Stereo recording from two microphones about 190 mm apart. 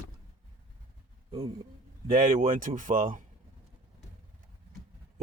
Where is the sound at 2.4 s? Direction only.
45° right (ahead or behind).